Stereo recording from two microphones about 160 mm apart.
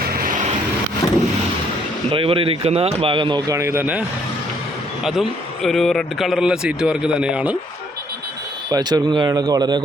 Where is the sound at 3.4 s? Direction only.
15° right (ahead or behind).